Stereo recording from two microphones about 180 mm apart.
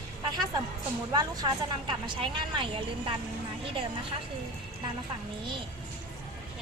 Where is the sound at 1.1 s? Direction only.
20° right (ahead or behind).